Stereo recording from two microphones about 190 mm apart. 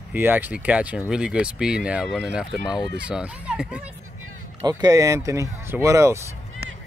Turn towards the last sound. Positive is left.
turn(degrees=-15)  # may be behind; listen again after turning